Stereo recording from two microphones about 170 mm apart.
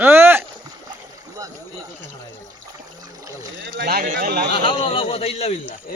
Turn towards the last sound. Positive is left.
turn(degrees=40)  # may be behind; listen again after turning